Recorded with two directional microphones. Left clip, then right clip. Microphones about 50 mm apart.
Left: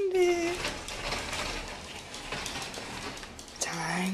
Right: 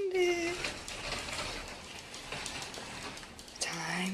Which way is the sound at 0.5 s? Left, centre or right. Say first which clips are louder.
Left 4 dB; centre.